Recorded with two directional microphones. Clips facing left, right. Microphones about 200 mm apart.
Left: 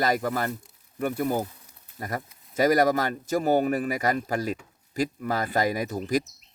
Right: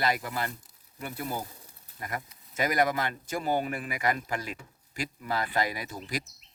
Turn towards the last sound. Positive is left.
turn(degrees=45)  # may be behind; listen again after turning